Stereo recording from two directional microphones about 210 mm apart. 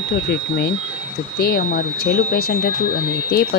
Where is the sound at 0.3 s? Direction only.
50° left (ahead or behind).